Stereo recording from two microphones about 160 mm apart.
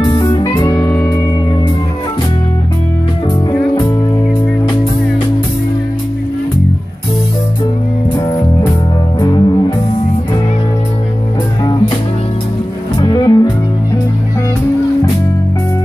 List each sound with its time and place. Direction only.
0.0 s music: 25° left (ahead or behind)
9.2 s music: 25° left (ahead or behind)
13.0 s music: 25° left (ahead or behind)